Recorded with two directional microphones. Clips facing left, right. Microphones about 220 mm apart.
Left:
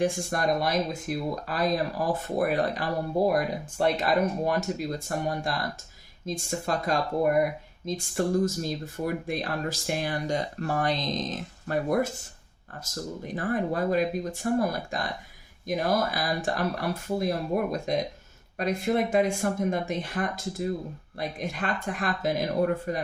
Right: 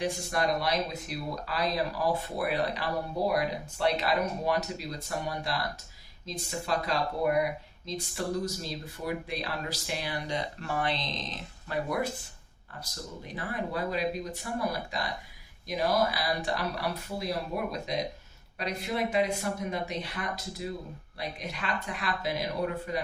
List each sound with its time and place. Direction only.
0.0 s speech: 50° left (ahead or behind)